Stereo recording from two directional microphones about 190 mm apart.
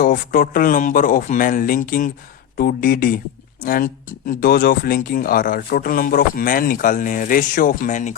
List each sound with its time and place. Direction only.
0.0 s speech: 50° left (ahead or behind)